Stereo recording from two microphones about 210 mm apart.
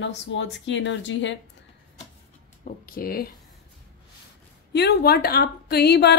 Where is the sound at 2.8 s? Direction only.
45° left (ahead or behind).